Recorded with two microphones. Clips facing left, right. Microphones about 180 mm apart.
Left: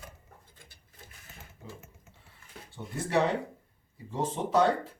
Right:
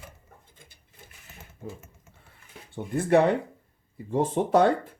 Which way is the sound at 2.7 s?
55° right (ahead or behind).